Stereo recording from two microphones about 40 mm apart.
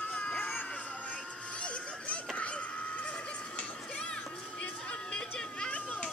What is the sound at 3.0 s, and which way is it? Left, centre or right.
Music, left.